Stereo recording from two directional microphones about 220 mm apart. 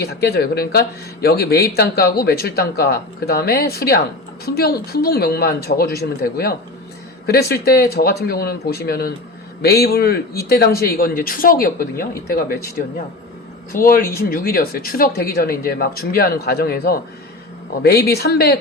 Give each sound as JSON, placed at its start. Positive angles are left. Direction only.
{"t": 0.0, "sound": "speech", "side_deg": 45}
{"t": 13.7, "sound": "speech", "side_deg": 40}